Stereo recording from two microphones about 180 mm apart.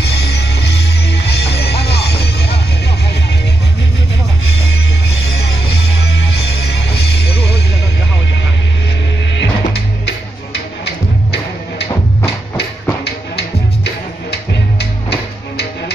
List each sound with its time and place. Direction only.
0.0 s music: 65° left (ahead or behind)
6.1 s music: 70° left (ahead or behind)
9.3 s music: 80° left
14.3 s music: 65° left (ahead or behind)